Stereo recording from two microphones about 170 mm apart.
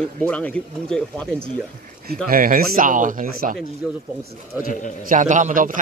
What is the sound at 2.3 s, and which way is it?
Speech, 55° right (ahead or behind).